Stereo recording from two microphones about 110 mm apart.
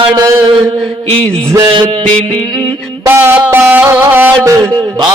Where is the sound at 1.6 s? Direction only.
55° right (ahead or behind).